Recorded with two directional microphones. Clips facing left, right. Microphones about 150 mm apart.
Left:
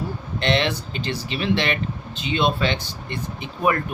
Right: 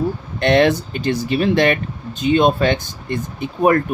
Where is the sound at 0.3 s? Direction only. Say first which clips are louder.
Right 8 dB; 50° right (ahead or behind).